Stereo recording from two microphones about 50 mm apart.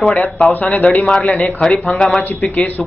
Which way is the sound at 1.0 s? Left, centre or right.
Centre.